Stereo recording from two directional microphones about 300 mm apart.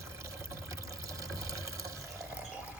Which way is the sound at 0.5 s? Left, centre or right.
Centre.